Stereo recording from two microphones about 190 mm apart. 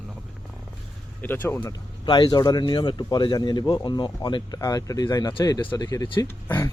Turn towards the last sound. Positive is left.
turn(degrees=10)  # may be behind; listen again after turning